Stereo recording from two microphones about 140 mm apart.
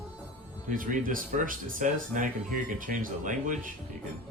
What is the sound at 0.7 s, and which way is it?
Speech, 70° right (ahead or behind).